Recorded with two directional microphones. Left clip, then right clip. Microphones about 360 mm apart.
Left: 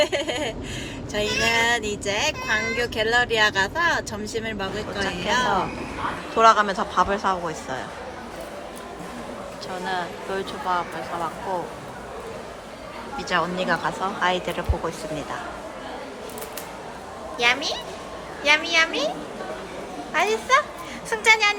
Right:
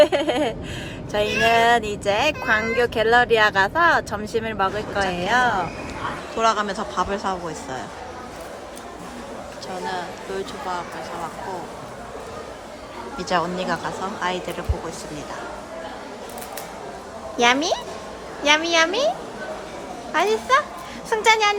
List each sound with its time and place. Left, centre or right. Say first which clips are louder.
0.0 s speech: right 6 dB; right
6.3 s speech: left 5 dB; centre
9.8 s speech: left 2 dB; centre
13.1 s speech: right 1 dB; centre
17.3 s speech: right 3 dB; centre
20.1 s speech: right 1 dB; centre